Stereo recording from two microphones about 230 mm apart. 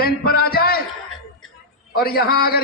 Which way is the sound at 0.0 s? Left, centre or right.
Left.